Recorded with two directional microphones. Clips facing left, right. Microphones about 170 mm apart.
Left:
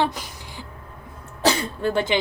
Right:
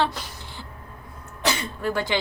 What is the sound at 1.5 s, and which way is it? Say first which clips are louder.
Speech: left 4 dB; 25° left (ahead or behind).